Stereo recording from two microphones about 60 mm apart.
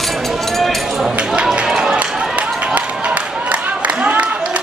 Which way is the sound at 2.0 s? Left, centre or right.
Centre.